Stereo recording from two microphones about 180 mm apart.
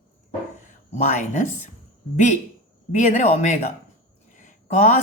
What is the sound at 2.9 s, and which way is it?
A woman's voice, 40° left (ahead or behind).